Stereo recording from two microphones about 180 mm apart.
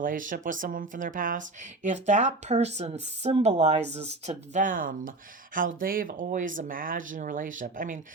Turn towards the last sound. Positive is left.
turn(degrees=-45)  # may be behind; listen again after turning